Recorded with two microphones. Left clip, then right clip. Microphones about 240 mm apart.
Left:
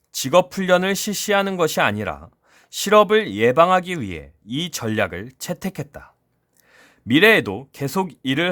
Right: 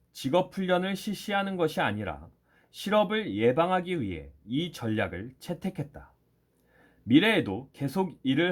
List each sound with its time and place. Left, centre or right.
0.1 s speech: left